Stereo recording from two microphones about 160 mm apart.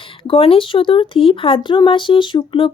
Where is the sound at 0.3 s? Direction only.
35° left (ahead or behind).